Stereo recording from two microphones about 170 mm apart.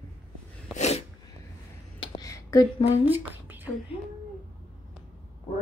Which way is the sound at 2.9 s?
10° right (ahead or behind).